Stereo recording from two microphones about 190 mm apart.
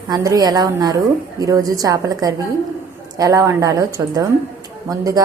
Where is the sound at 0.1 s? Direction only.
20° right (ahead or behind).